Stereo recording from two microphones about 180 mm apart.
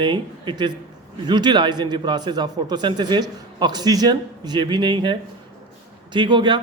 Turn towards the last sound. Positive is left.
turn(degrees=-25)  # may be behind; listen again after turning